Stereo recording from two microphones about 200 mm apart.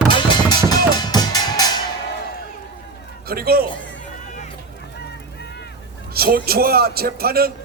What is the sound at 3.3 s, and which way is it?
Speech, 50° right (ahead or behind).